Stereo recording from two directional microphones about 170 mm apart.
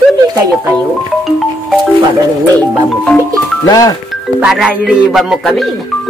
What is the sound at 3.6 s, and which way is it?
Speech, 20° left (ahead or behind).